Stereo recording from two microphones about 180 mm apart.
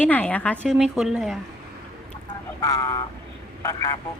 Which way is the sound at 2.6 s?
20° left (ahead or behind).